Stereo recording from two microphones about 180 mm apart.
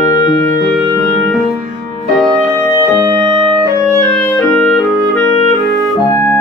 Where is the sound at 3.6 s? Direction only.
10° left (ahead or behind).